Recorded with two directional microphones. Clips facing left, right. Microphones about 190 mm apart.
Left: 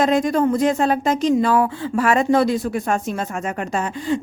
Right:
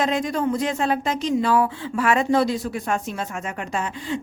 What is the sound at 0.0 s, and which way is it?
A woman's voice, 45° left (ahead or behind).